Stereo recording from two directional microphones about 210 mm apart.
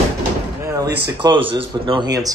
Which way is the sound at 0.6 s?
15° right (ahead or behind).